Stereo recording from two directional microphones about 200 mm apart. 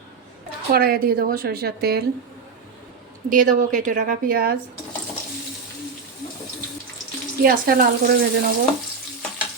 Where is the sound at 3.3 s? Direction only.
40° right (ahead or behind).